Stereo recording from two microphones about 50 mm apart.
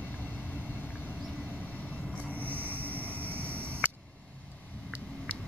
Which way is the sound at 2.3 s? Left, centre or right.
Right.